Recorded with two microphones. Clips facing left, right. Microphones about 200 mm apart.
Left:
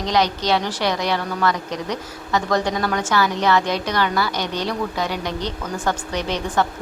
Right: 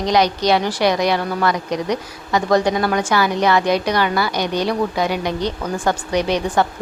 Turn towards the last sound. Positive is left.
turn(degrees=-15)  # may be behind; listen again after turning